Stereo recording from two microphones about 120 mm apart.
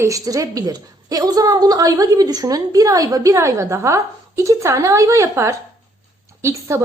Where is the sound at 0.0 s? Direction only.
30° right (ahead or behind).